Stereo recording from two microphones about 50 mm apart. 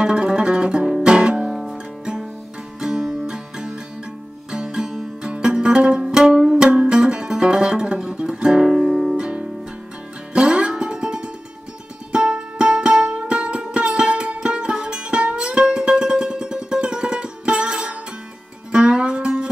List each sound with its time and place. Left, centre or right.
0.0 s music: centre